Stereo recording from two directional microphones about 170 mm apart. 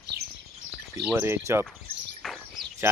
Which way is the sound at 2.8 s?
15° right (ahead or behind).